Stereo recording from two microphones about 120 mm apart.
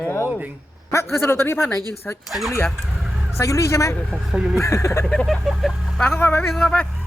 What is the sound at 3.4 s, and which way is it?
Speech, 25° left (ahead or behind).